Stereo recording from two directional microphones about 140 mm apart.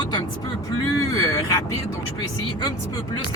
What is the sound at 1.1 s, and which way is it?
Vehicle, 25° left (ahead or behind).